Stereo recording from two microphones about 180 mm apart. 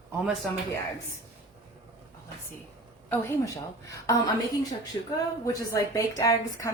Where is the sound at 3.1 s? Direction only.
15° left (ahead or behind).